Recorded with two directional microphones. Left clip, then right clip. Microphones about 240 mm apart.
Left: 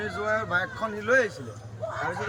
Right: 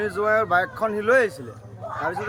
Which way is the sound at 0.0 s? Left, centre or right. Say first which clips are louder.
Right 7 dB; right.